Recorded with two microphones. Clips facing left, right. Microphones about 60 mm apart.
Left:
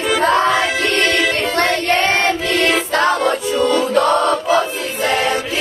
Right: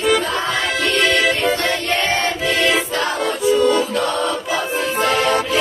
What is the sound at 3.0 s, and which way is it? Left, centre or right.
Music, left.